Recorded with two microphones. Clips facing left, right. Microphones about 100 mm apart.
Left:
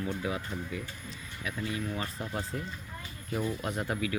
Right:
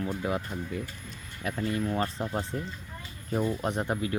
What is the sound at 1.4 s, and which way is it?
Speech, 50° right (ahead or behind).